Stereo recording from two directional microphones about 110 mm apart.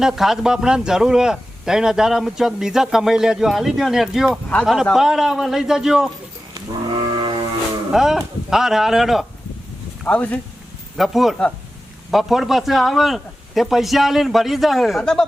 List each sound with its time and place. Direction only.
0.0 s speech: 5° right (ahead or behind)
6.9 s a sound: 50° right (ahead or behind)
7.9 s speech: 5° right (ahead or behind)
10.0 s speech: 10° left (ahead or behind)
10.9 s speech: centre (ahead or behind)